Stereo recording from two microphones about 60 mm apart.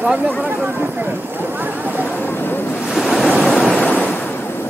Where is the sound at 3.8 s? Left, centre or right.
Left.